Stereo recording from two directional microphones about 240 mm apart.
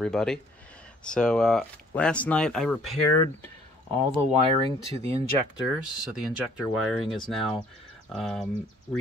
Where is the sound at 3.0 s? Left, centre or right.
Left.